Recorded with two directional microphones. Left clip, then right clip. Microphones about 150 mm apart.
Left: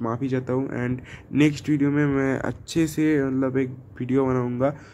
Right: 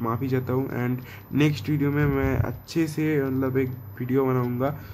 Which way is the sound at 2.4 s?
30° left (ahead or behind).